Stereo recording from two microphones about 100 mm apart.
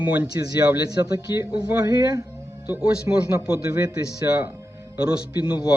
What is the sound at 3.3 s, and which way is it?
Speech, 30° right (ahead or behind).